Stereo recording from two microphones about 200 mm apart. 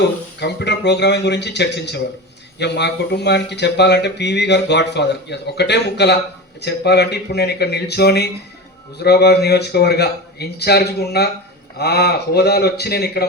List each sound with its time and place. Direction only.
0.3 s a man's voice: 55° left (ahead or behind)